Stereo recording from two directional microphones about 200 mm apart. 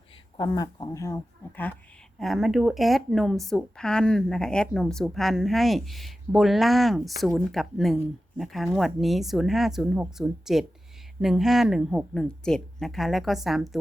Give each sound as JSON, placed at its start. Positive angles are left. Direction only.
{"t": 0.3, "sound": "speech", "side_deg": 20}
{"t": 2.1, "sound": "a woman's voice", "side_deg": 0}